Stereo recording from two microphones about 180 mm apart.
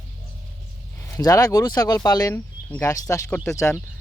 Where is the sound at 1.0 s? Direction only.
15° left (ahead or behind).